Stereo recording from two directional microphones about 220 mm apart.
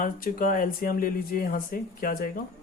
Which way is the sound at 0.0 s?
40° left (ahead or behind).